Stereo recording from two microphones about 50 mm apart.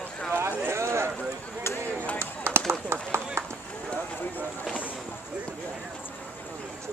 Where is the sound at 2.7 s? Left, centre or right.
Right.